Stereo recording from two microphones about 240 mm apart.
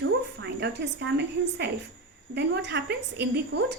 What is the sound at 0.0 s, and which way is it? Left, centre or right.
A woman's voice, right.